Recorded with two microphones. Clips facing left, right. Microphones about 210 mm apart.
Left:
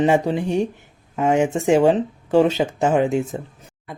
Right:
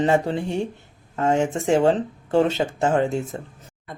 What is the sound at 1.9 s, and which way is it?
Speech, 10° left (ahead or behind).